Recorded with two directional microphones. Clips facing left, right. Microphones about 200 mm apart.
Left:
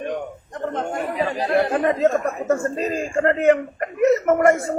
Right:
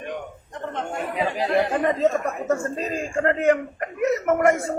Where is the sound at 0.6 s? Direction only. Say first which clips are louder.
Left 5 dB; 35° left (ahead or behind).